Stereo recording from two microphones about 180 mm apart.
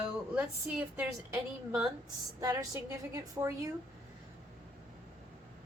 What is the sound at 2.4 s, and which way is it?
A woman's voice, 20° right (ahead or behind).